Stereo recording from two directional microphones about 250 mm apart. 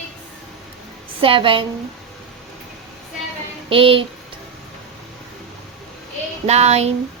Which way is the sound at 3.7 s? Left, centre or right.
Right.